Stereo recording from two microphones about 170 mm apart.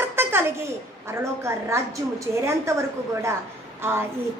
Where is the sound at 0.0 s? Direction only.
15° right (ahead or behind).